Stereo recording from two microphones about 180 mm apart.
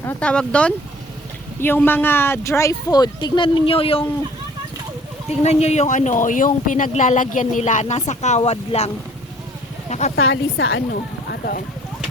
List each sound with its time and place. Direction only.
0.0 s speech: 10° left (ahead or behind); by 4.0 s 30° left (ahead or behind)
5.4 s speech: 35° left (ahead or behind)
10.2 s a woman's voice: 85° left
11.3 s a sound: 55° left (ahead or behind)